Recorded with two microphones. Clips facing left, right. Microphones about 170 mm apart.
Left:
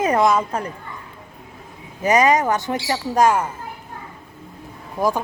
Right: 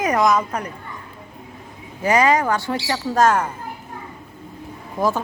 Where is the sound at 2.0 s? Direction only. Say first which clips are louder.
Left 1 dB; 20° left (ahead or behind).